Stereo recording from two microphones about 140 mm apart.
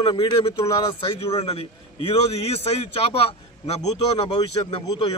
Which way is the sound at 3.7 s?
40° left (ahead or behind).